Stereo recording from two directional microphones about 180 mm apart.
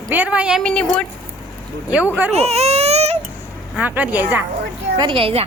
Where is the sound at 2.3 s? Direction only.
35° right (ahead or behind).